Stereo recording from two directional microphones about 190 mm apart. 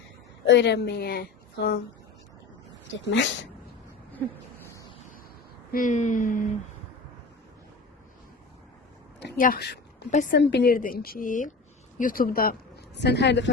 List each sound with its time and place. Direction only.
0.4 s a woman's voice: 65° left (ahead or behind)
2.9 s speech: 70° left (ahead or behind)
4.6 s a sound: 15° left (ahead or behind)
5.7 s a woman's voice: 40° left (ahead or behind)
9.4 s a woman's voice: 55° left (ahead or behind)